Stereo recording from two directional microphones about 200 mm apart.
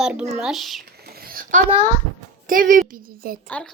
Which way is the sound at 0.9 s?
50° right (ahead or behind).